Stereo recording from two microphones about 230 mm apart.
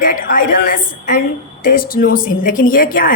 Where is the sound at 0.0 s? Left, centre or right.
Left.